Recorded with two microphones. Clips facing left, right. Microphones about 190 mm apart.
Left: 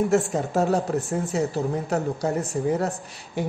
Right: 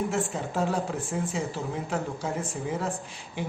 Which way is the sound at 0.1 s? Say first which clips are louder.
Left 7 dB; 45° left (ahead or behind).